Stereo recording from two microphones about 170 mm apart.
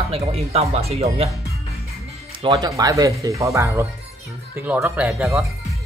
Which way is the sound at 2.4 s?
25° right (ahead or behind).